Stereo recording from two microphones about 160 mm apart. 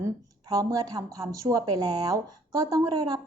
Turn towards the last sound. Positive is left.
turn(degrees=-25)  # may be behind; listen again after turning